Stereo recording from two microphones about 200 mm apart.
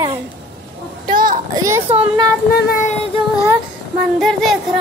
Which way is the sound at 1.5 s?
15° right (ahead or behind).